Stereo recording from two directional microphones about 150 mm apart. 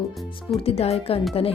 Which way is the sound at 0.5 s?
40° left (ahead or behind).